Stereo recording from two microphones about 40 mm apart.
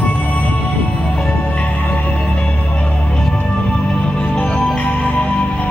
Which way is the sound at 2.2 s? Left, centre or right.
Left.